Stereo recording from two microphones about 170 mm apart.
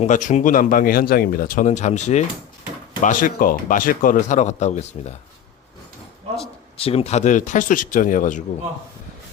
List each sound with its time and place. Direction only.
0.0 s a man's voice: 45° left (ahead or behind)
6.4 s a man's voice: 35° left (ahead or behind)